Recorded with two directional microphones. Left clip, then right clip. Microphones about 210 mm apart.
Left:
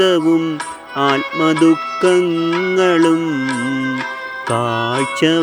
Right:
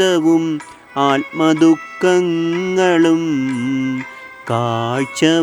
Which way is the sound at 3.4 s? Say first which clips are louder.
Left 1 dB; 35° left (ahead or behind).